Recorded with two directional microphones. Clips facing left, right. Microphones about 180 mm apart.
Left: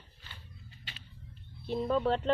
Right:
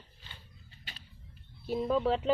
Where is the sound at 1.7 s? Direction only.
5° right (ahead or behind).